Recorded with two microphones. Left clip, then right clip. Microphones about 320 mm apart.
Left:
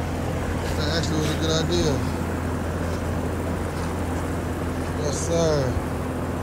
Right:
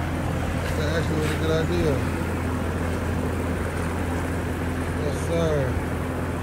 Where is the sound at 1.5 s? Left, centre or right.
Centre.